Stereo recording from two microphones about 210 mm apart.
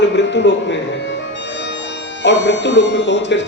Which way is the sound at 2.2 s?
60° left (ahead or behind).